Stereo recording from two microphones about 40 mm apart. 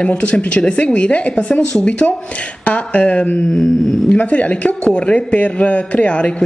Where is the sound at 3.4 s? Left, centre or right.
Centre.